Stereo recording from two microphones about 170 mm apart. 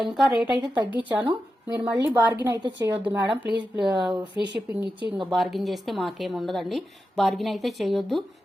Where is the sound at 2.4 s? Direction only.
20° right (ahead or behind).